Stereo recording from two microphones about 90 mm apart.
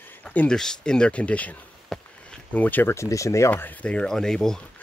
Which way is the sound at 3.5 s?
15° left (ahead or behind).